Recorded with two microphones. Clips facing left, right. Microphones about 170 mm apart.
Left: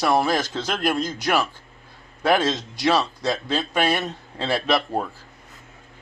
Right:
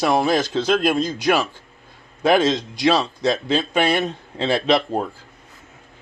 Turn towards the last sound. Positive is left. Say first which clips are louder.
# right 3 dB
turn(degrees=-20)  # may be behind; listen again after turning